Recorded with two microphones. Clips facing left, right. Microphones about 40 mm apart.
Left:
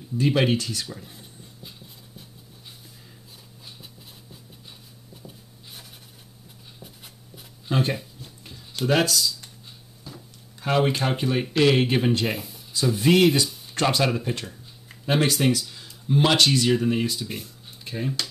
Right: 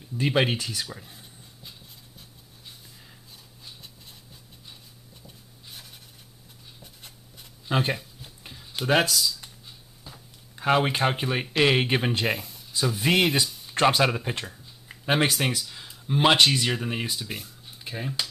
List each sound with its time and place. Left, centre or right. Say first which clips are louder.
0.2 s speech: left 2 dB; centre
1.0 s a sound: left 3 dB; centre
5.2 s rub: left 3 dB; centre
6.8 s writing: left 3 dB; centre
7.7 s speech: left 1 dB; centre
8.2 s a sound: left 1 dB; centre
11.6 s speech: left 2 dB; centre
12.3 s speech: right 1 dB; centre
13.0 s speech: left 4 dB; centre